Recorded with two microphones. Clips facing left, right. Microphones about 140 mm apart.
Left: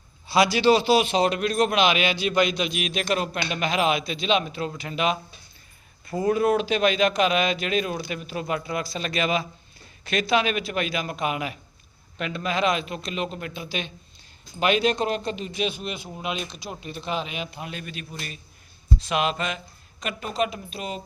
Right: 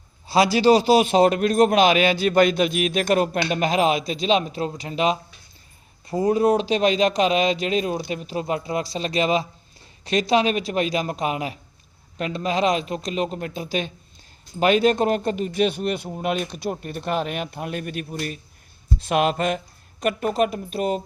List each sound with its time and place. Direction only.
0.3 s a man's voice: 35° right (ahead or behind)